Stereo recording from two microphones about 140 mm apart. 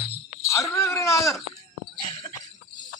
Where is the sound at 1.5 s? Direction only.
35° left (ahead or behind).